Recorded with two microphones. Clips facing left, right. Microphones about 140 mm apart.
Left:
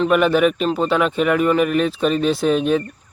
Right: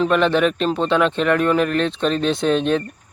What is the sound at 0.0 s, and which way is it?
A man's voice, 5° left (ahead or behind).